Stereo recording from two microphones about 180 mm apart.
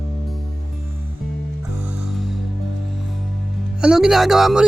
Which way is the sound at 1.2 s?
Centre (ahead or behind).